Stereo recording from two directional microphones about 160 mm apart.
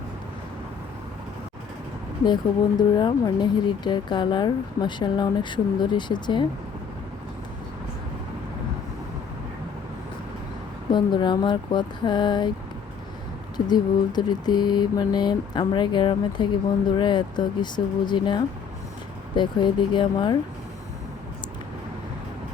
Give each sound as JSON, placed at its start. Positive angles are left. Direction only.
{"t": 2.2, "sound": "speech", "side_deg": 25}
{"t": 10.9, "sound": "speech", "side_deg": 30}
{"t": 13.7, "sound": "speech", "side_deg": 25}